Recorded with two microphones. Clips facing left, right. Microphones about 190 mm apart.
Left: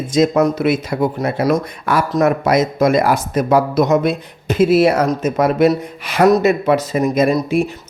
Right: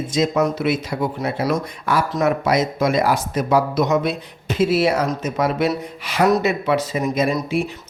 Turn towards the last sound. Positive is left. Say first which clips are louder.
# left 5 dB
turn(degrees=40)  # may be behind; listen again after turning